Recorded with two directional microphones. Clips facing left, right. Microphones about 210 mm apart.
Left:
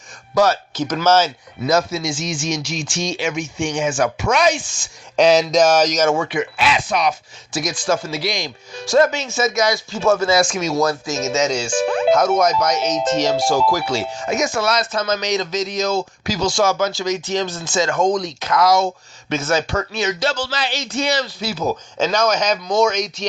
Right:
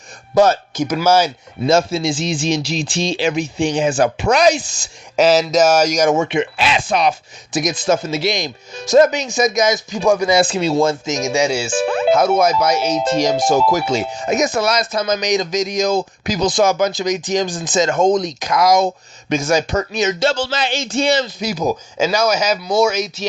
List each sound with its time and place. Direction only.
0.7 s speech: 10° right (ahead or behind)
1.6 s speech: 30° right (ahead or behind)
5.1 s speech: 5° right (ahead or behind)
6.1 s speech: 25° right (ahead or behind)
10.4 s speech: 30° right (ahead or behind); by 23.2 s 5° right (ahead or behind)